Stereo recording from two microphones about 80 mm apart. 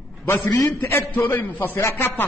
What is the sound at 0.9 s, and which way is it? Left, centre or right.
Speech, left.